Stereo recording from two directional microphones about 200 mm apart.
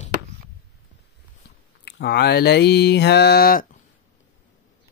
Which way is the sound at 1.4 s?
50° left (ahead or behind).